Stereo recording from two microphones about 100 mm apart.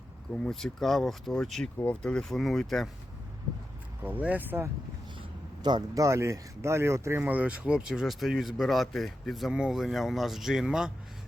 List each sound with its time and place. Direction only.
0.3 s speech: 5° left (ahead or behind)
4.0 s speech: 15° right (ahead or behind)
5.6 s speech: 50° right (ahead or behind)
6.0 s speech: 30° right (ahead or behind); by 10.9 s 5° right (ahead or behind)